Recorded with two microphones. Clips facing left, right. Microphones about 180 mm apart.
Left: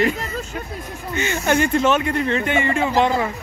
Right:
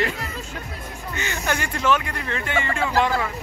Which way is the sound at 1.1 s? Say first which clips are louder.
Left 7 dB; 20° left (ahead or behind).